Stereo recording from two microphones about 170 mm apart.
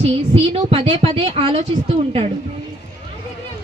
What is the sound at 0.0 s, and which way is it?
Speech, 35° right (ahead or behind).